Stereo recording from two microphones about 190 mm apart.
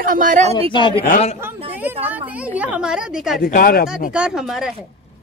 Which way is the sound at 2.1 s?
10° right (ahead or behind).